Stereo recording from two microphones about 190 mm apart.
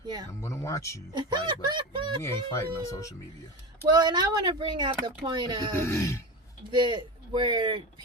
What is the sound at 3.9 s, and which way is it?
Speech, 20° right (ahead or behind).